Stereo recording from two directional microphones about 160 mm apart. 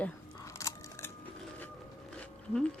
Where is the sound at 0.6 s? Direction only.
20° left (ahead or behind).